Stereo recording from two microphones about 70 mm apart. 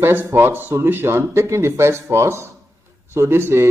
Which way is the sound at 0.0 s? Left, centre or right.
Right.